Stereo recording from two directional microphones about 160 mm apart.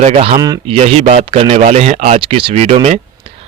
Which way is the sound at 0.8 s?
40° right (ahead or behind).